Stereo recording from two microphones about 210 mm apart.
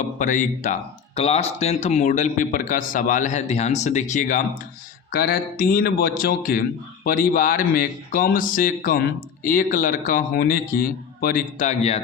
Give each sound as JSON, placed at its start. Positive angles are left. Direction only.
{"t": 0.0, "sound": "a man's voice", "side_deg": 35}